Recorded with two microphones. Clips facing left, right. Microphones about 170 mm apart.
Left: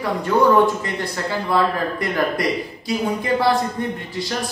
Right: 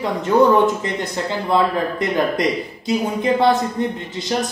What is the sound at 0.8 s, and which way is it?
Speech, 20° right (ahead or behind).